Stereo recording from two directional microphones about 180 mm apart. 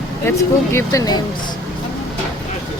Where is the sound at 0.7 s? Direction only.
20° left (ahead or behind).